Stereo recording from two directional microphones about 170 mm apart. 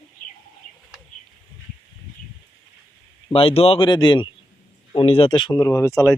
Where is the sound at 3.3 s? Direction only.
35° left (ahead or behind); by 6.1 s 20° left (ahead or behind).